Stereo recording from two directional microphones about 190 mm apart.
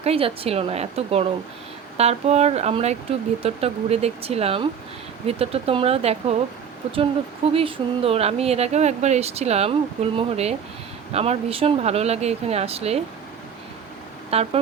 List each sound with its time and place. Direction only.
0.0 s speech: 30° right (ahead or behind)
7.5 s speech: 30° right (ahead or behind)
14.3 s speech: 30° right (ahead or behind)